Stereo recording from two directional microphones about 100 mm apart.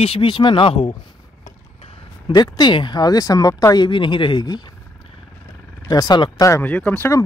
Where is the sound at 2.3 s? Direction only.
45° left (ahead or behind).